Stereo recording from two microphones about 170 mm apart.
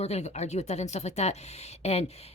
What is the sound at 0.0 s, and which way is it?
A woman's voice, 40° left (ahead or behind).